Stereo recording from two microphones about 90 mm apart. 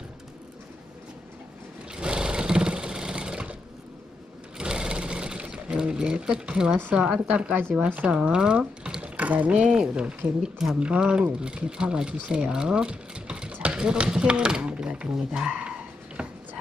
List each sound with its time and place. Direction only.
2.0 s sewing machine: 10° right (ahead or behind)
4.6 s sewing machine: 10° right (ahead or behind)
6.8 s a woman's voice: 15° right (ahead or behind)